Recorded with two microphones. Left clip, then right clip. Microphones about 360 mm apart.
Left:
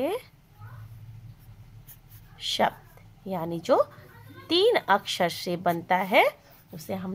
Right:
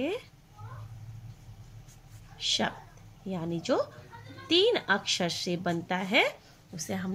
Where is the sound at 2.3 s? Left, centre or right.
Centre.